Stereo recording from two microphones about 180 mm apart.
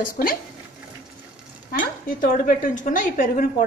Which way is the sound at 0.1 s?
50° left (ahead or behind).